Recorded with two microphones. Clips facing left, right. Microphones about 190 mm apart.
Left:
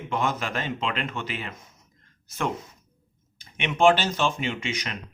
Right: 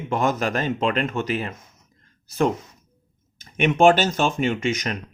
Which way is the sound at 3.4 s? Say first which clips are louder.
Right 4 dB; 45° right (ahead or behind).